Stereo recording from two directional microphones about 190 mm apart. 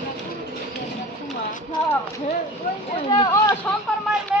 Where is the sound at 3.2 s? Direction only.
20° left (ahead or behind).